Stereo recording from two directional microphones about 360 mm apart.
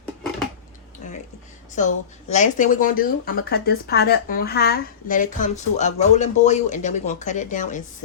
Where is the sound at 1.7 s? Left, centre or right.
Centre.